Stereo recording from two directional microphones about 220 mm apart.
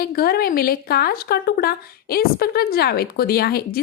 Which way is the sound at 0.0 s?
45° left (ahead or behind).